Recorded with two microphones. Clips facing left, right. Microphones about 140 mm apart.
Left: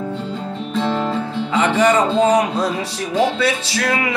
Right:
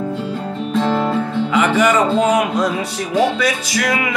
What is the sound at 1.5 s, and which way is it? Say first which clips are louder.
Speech: even; 30° left (ahead or behind).